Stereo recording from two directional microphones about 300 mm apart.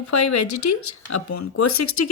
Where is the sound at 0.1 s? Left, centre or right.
Left.